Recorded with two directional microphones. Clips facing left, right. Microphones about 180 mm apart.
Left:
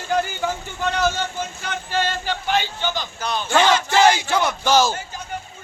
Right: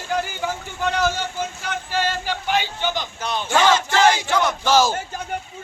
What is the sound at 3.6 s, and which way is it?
Battle cry, 10° left (ahead or behind).